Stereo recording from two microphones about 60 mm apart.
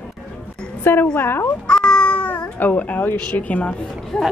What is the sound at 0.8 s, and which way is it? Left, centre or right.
Speech, left.